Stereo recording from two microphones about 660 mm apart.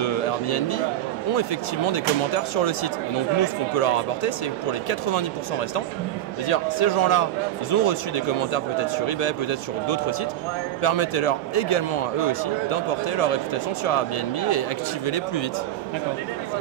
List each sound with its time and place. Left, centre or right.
0.0 s a sound: left
1.9 s a man's voice: left
6.5 s a man's voice: left